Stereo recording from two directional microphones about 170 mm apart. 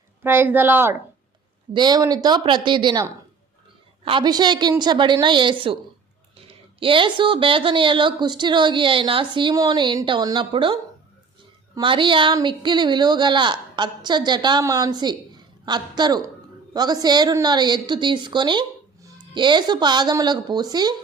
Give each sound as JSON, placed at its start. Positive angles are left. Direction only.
{"t": 0.2, "sound": "speech", "side_deg": -10}
{"t": 1.7, "sound": "a woman's voice", "side_deg": -25}